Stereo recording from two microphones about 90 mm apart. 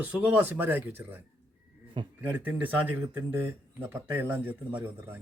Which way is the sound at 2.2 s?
20° right (ahead or behind).